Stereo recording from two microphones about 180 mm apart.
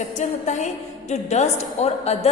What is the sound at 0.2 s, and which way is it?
A woman's voice, 40° left (ahead or behind).